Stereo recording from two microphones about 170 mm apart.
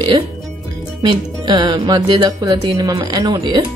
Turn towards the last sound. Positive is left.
turn(degrees=-25)  # may be behind; listen again after turning